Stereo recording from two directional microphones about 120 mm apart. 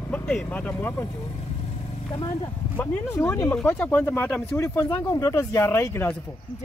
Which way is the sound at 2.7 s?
15° left (ahead or behind).